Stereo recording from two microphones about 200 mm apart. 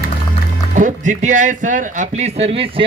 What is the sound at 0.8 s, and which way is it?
Speech, 40° right (ahead or behind).